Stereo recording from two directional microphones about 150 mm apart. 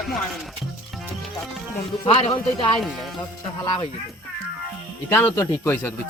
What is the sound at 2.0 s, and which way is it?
Speech, 40° left (ahead or behind).